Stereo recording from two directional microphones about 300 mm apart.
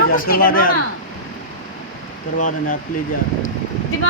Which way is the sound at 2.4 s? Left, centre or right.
Left.